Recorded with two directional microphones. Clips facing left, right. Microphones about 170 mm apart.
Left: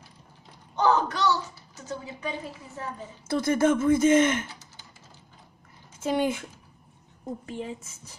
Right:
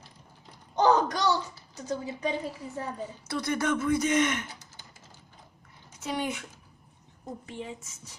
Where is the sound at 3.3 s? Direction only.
25° left (ahead or behind).